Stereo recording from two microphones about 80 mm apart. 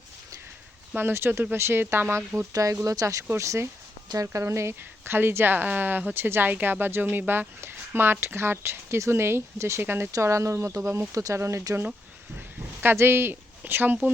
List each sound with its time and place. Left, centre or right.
0.9 s speech: right
2.5 s speech: right
12.8 s speech: right